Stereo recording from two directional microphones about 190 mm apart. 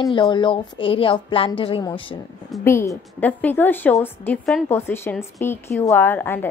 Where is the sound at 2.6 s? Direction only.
15° left (ahead or behind).